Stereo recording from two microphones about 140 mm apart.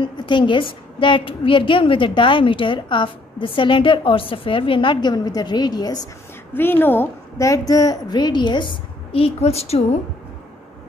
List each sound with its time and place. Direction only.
0.0 s a woman's voice: 35° left (ahead or behind)
6.5 s a woman's voice: 15° left (ahead or behind); by 9.9 s 50° left (ahead or behind)